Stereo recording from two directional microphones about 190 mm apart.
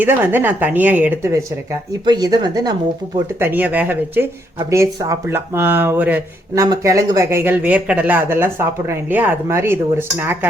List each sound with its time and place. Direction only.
0.0 s speech: 10° right (ahead or behind)
3.4 s speech: 10° right (ahead or behind)